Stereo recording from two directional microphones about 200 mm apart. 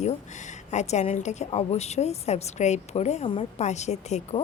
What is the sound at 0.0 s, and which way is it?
A woman's voice, 35° left (ahead or behind).